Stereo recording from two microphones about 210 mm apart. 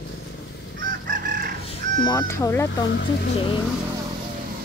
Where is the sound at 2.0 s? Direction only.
15° left (ahead or behind).